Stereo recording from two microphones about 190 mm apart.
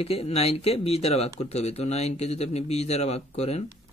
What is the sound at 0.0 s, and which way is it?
Speech, 35° left (ahead or behind).